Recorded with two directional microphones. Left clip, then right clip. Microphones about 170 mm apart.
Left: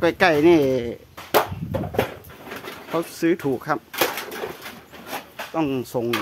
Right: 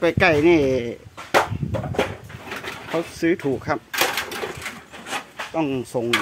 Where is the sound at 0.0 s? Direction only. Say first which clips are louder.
Even; 5° left (ahead or behind).